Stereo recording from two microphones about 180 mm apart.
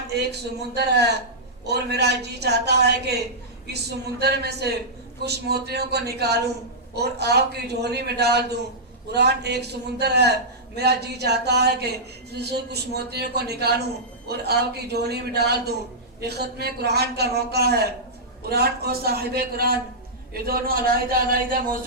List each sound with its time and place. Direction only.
0.1 s a woman's voice: 65° right (ahead or behind)